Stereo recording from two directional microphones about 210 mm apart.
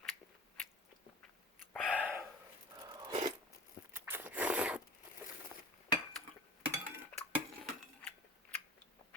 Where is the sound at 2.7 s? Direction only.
20° right (ahead or behind).